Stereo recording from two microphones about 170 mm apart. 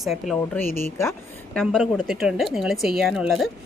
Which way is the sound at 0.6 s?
15° left (ahead or behind).